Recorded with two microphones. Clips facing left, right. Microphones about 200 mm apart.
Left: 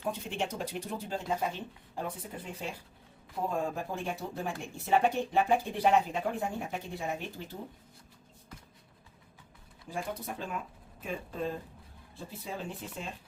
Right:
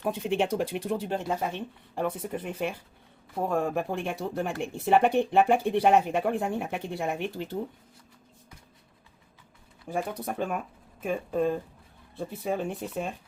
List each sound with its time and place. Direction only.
0.0 s speech: 65° right (ahead or behind)
9.9 s speech: 60° right (ahead or behind)